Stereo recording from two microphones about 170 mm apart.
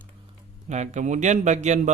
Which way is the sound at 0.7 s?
45° right (ahead or behind).